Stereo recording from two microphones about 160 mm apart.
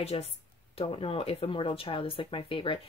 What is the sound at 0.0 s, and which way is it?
Speech, 40° left (ahead or behind).